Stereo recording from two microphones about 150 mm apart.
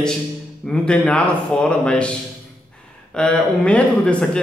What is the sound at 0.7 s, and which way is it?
Speech, 5° left (ahead or behind).